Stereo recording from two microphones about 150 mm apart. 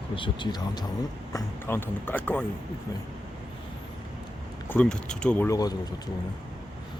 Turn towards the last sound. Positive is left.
turn(degrees=25)  # may be behind; listen again after turning